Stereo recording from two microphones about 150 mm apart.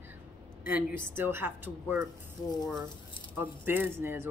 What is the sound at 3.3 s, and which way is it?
Speech, 15° right (ahead or behind).